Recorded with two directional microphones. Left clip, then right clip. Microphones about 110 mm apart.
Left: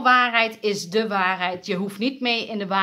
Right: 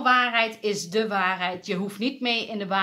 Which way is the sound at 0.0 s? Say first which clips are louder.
Left 3 dB; 25° left (ahead or behind).